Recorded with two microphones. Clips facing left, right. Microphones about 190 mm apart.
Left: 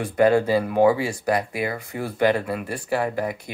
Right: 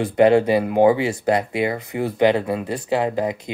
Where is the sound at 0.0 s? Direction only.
20° right (ahead or behind).